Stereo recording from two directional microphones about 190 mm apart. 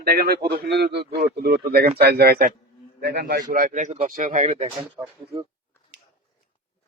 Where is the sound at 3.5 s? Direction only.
45° right (ahead or behind).